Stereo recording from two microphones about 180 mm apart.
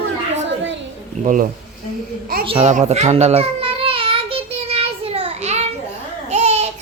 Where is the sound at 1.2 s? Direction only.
45° right (ahead or behind).